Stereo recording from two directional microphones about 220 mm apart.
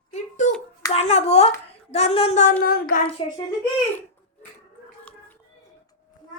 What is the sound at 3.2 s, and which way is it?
Speech, 25° left (ahead or behind).